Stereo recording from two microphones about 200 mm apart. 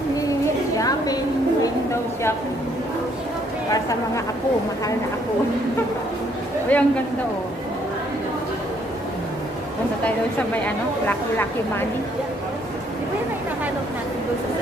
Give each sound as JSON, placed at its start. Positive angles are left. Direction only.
{"t": 0.7, "sound": "a sound", "side_deg": 20}
{"t": 6.7, "sound": "a woman's voice", "side_deg": 5}
{"t": 11.1, "sound": "a woman's voice", "side_deg": 10}